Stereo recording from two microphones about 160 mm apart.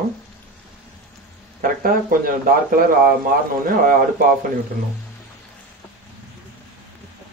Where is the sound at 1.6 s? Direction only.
60° right (ahead or behind).